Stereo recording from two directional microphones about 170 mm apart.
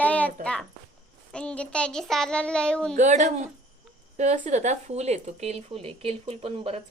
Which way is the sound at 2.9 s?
45° right (ahead or behind).